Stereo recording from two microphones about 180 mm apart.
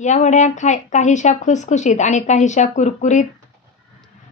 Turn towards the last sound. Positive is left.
turn(degrees=40)  # may be behind; listen again after turning